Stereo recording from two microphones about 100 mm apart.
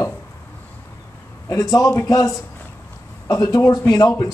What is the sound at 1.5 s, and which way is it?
A man's voice, 35° left (ahead or behind).